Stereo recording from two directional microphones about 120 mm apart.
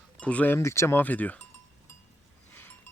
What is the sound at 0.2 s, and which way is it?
Speech, 10° left (ahead or behind).